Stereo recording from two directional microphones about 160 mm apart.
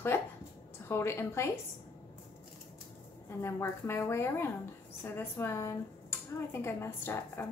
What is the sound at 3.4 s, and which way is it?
A woman's voice, 15° left (ahead or behind).